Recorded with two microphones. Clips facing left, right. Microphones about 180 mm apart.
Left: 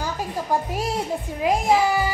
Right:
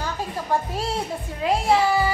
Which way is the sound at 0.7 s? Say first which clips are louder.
Left 2 dB; 15° left (ahead or behind).